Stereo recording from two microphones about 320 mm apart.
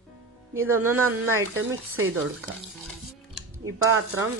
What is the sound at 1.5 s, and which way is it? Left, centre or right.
Speech, right.